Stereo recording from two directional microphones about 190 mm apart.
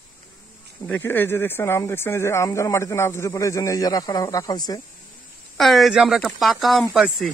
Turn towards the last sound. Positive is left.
turn(degrees=0)  # may be behind; listen again after turning